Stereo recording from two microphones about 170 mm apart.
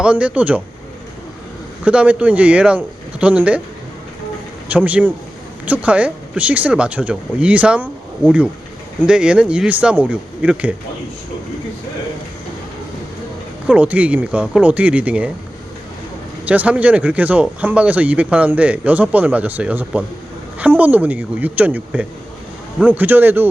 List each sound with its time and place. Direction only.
0.0 s speech: 5° right (ahead or behind)
1.8 s speech: 5° right (ahead or behind)
4.7 s speech: 10° right (ahead or behind)
13.7 s speech: 10° right (ahead or behind)
16.5 s speech: 10° right (ahead or behind)